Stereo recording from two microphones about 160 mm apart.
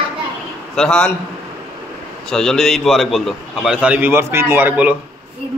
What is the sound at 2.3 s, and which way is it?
A man's voice, 5° left (ahead or behind).